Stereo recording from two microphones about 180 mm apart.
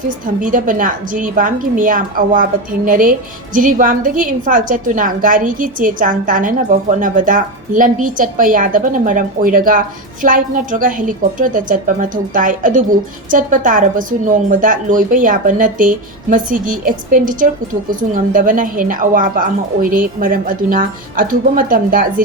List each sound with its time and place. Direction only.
0.4 s a woman's voice: 50° right (ahead or behind)